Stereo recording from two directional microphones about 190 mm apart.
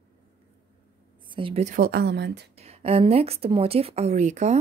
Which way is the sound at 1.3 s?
25° right (ahead or behind).